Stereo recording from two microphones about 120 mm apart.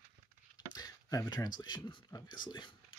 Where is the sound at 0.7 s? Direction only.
30° left (ahead or behind).